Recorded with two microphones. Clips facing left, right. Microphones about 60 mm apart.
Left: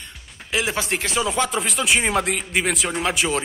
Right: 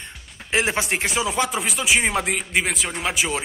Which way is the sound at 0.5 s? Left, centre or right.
Right.